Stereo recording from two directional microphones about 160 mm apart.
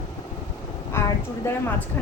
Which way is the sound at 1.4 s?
15° left (ahead or behind).